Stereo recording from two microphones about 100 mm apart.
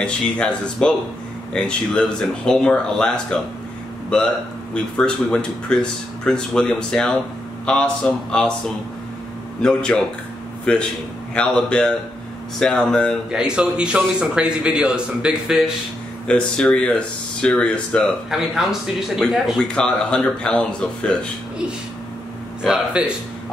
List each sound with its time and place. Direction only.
0.0 s speech: 10° left (ahead or behind)
4.9 s speech: 10° left (ahead or behind)
9.6 s speech: 10° left (ahead or behind)
13.3 s a man's voice: 10° right (ahead or behind)
16.3 s speech: 10° left (ahead or behind)
18.3 s a man's voice: centre (ahead or behind)
19.6 s speech: 10° left (ahead or behind)
23.0 s a man's voice: 10° right (ahead or behind)